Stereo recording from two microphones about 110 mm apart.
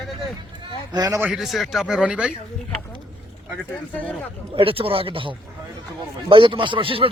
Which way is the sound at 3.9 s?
10° left (ahead or behind).